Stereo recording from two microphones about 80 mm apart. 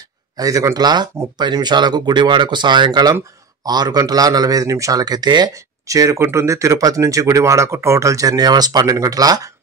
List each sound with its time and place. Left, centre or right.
0.4 s a man's voice: right
5.5 s speech: right